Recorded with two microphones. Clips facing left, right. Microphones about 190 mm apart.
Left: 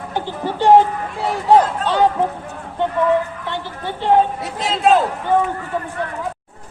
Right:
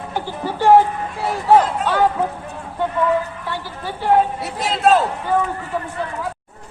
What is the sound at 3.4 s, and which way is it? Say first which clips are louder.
Speech: left 2 dB; 20° left (ahead or behind).